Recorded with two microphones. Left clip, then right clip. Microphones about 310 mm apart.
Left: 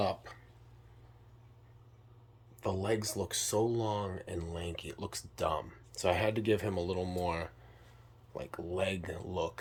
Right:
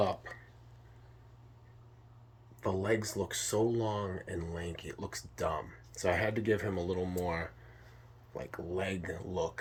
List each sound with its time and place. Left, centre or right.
2.6 s speech: centre